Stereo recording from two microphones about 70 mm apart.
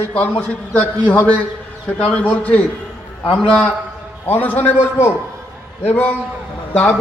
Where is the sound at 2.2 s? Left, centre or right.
Left.